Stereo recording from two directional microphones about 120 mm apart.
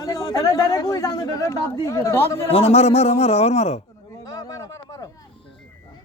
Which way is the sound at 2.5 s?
60° left (ahead or behind).